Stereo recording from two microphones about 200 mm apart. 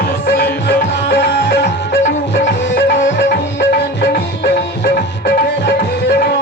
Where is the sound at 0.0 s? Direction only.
50° left (ahead or behind).